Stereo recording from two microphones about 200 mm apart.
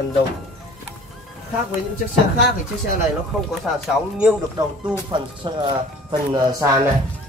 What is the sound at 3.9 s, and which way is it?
Speech, 5° right (ahead or behind).